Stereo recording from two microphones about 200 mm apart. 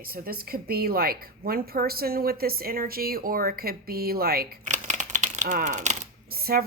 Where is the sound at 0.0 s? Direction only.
50° right (ahead or behind).